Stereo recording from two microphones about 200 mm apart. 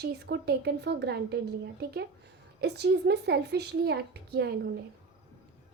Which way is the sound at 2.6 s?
55° right (ahead or behind).